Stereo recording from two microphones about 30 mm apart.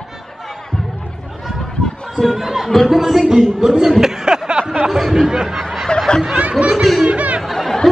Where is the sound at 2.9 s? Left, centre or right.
Centre.